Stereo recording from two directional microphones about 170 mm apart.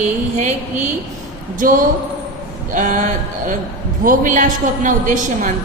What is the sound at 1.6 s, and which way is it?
A woman's voice, 55° right (ahead or behind).